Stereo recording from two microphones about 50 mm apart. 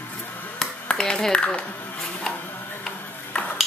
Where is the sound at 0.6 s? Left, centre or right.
Centre.